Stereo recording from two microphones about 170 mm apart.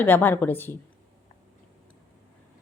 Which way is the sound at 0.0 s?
10° left (ahead or behind).